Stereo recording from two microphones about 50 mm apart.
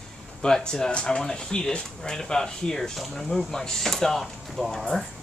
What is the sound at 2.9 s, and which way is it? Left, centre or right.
Speech, centre.